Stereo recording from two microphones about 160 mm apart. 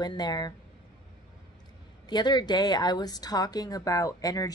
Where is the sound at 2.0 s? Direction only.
25° left (ahead or behind).